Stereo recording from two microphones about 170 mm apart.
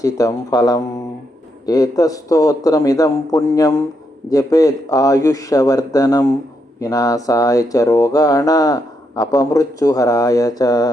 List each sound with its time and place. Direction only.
0.0 s speech: 20° left (ahead or behind)